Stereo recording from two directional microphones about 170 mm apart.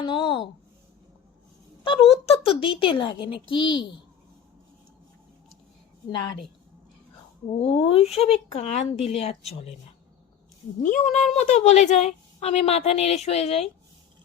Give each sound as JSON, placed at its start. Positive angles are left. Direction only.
{"t": 0.0, "sound": "speech", "side_deg": 30}
{"t": 1.8, "sound": "a woman's voice", "side_deg": 30}
{"t": 7.6, "sound": "a woman's voice", "side_deg": 35}
{"t": 10.8, "sound": "a woman's voice", "side_deg": 45}